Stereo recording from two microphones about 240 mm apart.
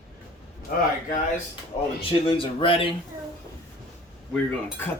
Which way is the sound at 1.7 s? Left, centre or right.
Left.